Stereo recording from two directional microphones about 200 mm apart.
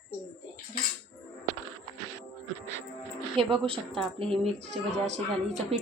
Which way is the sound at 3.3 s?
5° left (ahead or behind).